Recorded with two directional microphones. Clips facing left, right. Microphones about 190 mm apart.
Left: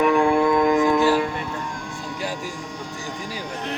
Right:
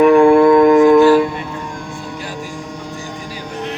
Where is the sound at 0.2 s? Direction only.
70° right (ahead or behind).